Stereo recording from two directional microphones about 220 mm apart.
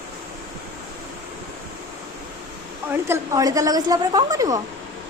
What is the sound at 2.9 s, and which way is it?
A woman's voice, 15° right (ahead or behind).